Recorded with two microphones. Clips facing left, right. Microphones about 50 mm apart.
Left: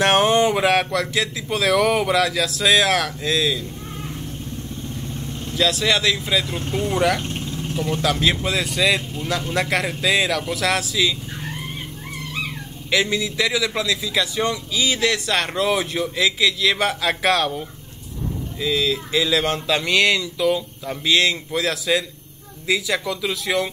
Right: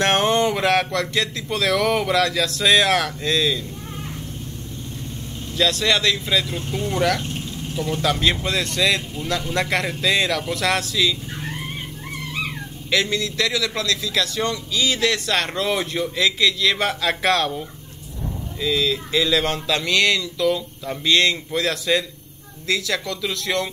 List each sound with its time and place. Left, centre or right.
0.0 s a man's voice: centre
5.6 s a man's voice: centre
12.9 s a man's voice: centre